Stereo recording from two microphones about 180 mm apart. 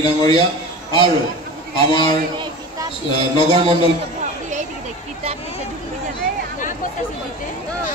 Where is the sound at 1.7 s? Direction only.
25° left (ahead or behind).